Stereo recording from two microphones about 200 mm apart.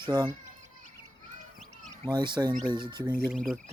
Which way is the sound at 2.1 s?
20° right (ahead or behind).